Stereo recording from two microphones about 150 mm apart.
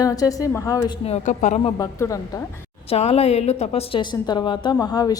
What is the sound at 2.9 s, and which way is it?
A woman's voice, 40° left (ahead or behind).